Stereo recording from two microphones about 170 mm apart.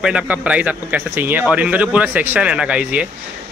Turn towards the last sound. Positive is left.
turn(degrees=-5)  # may be behind; listen again after turning